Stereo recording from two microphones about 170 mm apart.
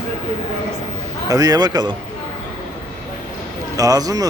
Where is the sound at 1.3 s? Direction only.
20° right (ahead or behind).